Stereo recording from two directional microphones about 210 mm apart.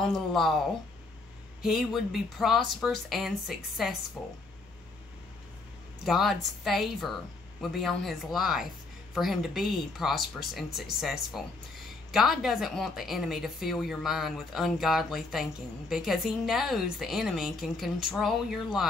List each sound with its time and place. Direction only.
0.0 s speech: centre (ahead or behind)
1.6 s speech: centre (ahead or behind)
6.0 s speech: centre (ahead or behind)